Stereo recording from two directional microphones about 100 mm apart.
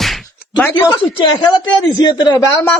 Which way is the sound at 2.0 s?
40° left (ahead or behind).